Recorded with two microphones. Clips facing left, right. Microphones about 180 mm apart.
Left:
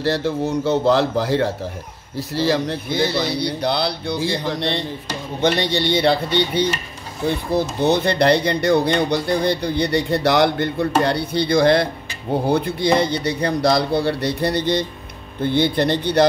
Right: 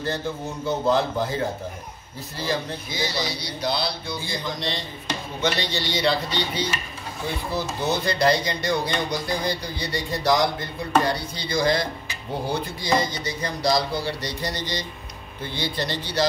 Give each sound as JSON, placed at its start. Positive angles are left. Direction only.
{"t": 0.0, "sound": "a man's voice", "side_deg": 80}